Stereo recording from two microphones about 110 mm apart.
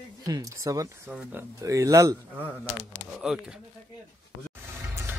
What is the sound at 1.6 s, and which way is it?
Speech, 30° right (ahead or behind).